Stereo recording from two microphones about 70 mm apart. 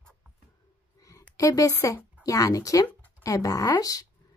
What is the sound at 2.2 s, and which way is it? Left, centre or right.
Speech, left.